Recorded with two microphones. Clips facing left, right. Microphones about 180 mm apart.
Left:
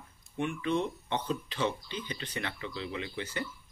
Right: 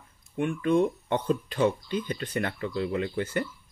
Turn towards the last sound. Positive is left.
turn(degrees=-50)  # may be behind; listen again after turning